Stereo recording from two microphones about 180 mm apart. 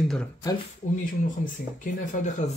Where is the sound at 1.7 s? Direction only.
45° left (ahead or behind).